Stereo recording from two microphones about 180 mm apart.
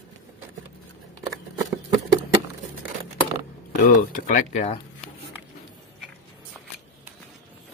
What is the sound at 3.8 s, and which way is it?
Speech, 50° left (ahead or behind).